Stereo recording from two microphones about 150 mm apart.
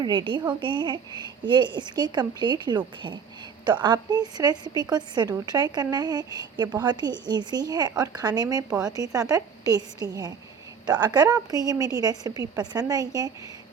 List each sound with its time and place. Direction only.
0.0 s a woman's voice: 30° right (ahead or behind)